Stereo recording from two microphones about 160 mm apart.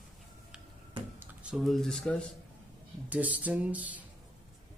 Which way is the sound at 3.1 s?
10° right (ahead or behind).